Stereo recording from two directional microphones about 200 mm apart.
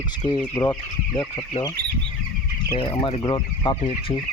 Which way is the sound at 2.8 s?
25° left (ahead or behind).